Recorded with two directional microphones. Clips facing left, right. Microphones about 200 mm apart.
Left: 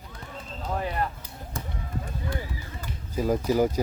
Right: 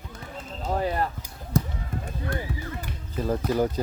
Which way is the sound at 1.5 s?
40° right (ahead or behind).